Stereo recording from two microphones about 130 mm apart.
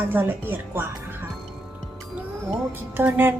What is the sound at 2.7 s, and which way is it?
Speech, 15° right (ahead or behind).